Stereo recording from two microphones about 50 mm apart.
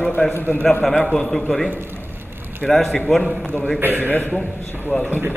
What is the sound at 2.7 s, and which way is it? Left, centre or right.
Speech, centre.